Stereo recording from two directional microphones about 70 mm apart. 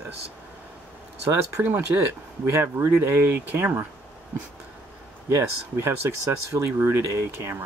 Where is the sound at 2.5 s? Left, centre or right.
Right.